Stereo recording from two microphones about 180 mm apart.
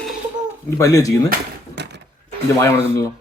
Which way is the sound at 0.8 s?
20° left (ahead or behind).